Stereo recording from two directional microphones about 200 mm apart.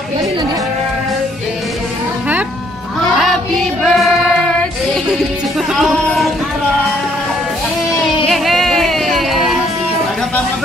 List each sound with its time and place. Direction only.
3.2 s music: centre (ahead or behind)
5.8 s speech: centre (ahead or behind)
8.0 s music: centre (ahead or behind)